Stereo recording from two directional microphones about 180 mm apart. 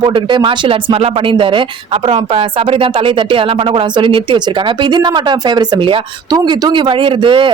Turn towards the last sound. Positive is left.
turn(degrees=-30)  # may be behind; listen again after turning